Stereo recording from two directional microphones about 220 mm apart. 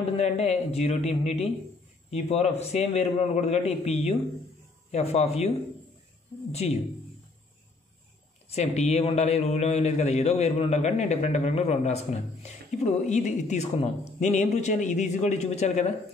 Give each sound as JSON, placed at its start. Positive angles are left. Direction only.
{"t": 0.2, "sound": "a man's voice", "side_deg": 30}
{"t": 6.5, "sound": "a man's voice", "side_deg": 30}
{"t": 8.5, "sound": "a man's voice", "side_deg": 30}